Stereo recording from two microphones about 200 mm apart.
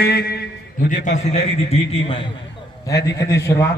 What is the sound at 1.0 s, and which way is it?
A man's voice, 35° left (ahead or behind).